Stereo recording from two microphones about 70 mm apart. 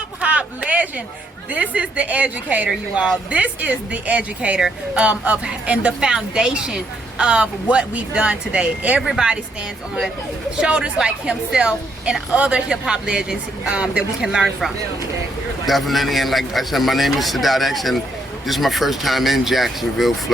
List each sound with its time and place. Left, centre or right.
0.2 s a sound: centre
1.5 s a woman's voice: centre
10.6 s a woman's voice: centre
15.6 s a man's voice: centre